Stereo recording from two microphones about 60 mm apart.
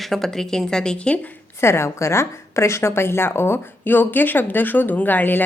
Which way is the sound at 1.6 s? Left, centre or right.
Left.